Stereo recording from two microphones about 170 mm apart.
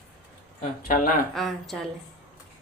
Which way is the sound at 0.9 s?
55° left (ahead or behind).